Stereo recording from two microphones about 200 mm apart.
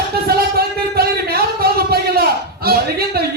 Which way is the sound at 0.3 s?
50° right (ahead or behind).